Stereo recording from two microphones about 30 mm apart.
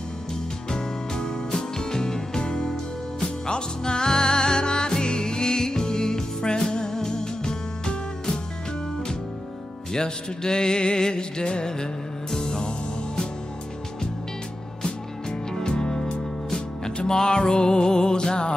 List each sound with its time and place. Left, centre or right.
0.7 s music: left
9.9 s music: left
15.7 s music: left